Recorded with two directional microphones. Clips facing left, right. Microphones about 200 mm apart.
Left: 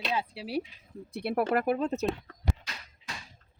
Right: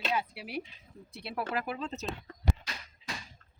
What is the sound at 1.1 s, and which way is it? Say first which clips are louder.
Speech: left 8 dB; 55° left (ahead or behind).